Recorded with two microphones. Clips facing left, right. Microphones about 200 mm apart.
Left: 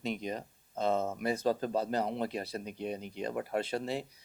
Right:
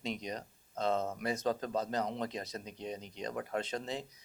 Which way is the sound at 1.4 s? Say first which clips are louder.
Left 3 dB; 30° left (ahead or behind).